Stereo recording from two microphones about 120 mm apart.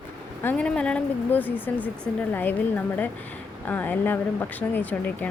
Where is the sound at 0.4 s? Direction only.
10° left (ahead or behind).